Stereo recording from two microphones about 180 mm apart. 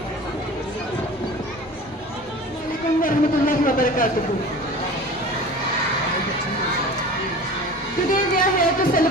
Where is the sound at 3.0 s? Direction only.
50° left (ahead or behind).